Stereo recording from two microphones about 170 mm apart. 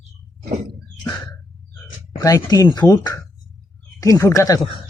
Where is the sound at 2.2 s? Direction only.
20° left (ahead or behind).